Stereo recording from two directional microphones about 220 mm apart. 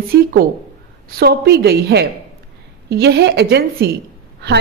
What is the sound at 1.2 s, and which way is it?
A woman's voice, 45° right (ahead or behind).